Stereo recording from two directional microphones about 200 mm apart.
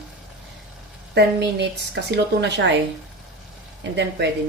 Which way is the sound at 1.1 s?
55° right (ahead or behind).